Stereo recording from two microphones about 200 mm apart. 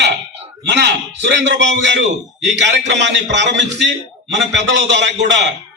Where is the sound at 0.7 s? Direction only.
60° right (ahead or behind).